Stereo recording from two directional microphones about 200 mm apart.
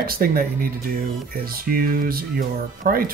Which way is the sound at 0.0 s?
45° right (ahead or behind).